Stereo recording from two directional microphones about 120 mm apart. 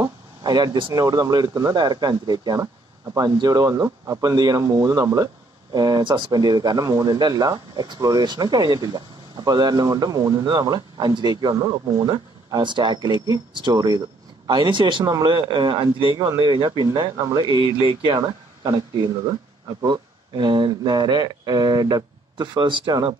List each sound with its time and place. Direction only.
0.4 s speech: 35° right (ahead or behind)
19.8 s speech: 40° right (ahead or behind)